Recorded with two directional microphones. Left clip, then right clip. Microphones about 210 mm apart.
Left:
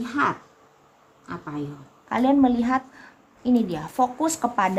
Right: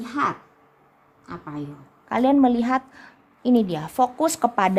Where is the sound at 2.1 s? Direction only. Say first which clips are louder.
Right 2 dB; 40° right (ahead or behind).